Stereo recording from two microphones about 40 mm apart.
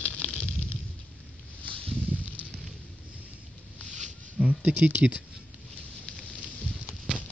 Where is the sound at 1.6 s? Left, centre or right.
Left.